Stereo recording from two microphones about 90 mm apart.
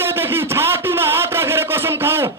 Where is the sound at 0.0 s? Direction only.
25° right (ahead or behind).